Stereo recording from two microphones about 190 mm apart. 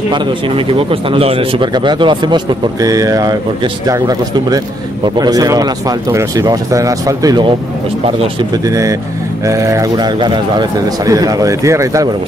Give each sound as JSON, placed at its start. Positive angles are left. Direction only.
{"t": 0.1, "sound": "speech", "side_deg": -30}